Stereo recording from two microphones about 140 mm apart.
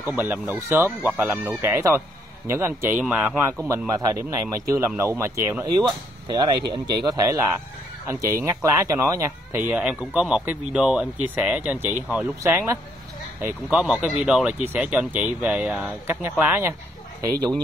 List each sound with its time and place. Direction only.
0.0 s speech: 15° right (ahead or behind)
3.6 s speech: 20° right (ahead or behind)
6.2 s speech: 30° right (ahead or behind); by 16.7 s 15° right (ahead or behind)